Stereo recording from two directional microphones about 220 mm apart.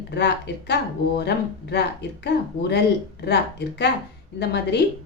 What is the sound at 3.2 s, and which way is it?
A woman's voice, 50° left (ahead or behind).